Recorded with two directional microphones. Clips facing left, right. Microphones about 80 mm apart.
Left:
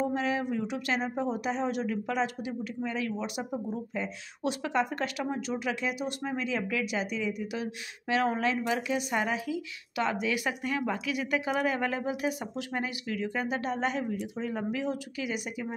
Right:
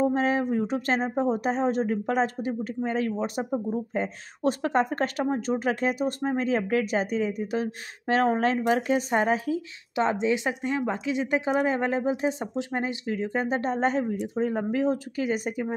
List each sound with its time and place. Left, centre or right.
0.0 s speech: right
9.9 s speech: right